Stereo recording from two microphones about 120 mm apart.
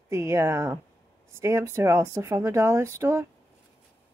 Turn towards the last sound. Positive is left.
turn(degrees=-25)  # may be behind; listen again after turning